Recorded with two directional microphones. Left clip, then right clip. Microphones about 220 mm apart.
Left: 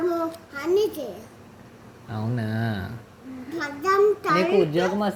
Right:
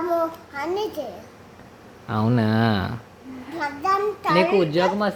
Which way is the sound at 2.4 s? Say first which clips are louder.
Right 8 dB; 20° right (ahead or behind).